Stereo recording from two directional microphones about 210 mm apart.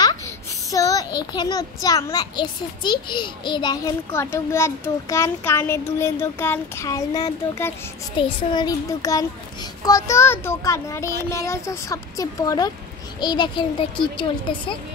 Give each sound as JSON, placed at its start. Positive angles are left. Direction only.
{"t": 0.0, "sound": "a child's voice", "side_deg": 15}